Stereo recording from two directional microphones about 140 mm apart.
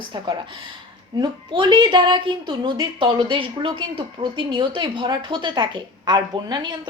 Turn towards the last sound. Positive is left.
turn(degrees=-30)  # may be behind; listen again after turning